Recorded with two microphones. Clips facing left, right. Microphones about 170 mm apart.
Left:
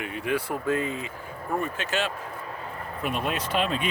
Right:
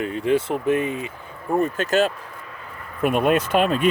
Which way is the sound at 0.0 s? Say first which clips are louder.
Right 8 dB; 30° right (ahead or behind).